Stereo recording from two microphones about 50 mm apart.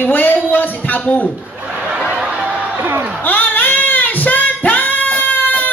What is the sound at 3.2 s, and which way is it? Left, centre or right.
Child singing, left.